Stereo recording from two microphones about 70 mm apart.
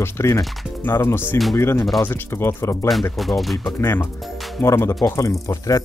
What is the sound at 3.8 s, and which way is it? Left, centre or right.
Speech, left.